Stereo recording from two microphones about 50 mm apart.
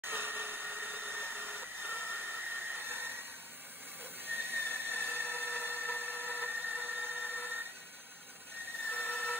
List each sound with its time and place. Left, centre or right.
0.0 s hair dryer: right
4.2 s a sound: right
8.8 s vehicle: right